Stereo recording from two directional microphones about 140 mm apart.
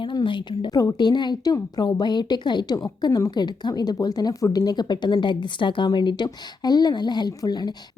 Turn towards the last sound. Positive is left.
turn(degrees=30)  # may be behind; listen again after turning